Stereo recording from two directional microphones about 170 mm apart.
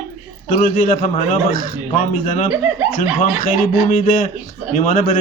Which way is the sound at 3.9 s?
45° left (ahead or behind).